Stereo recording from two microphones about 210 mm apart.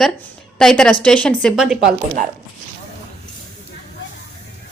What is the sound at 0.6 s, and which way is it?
Speech, 5° left (ahead or behind).